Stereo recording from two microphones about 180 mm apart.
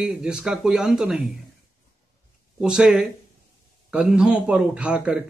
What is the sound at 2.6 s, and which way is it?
A man's voice, 5° right (ahead or behind).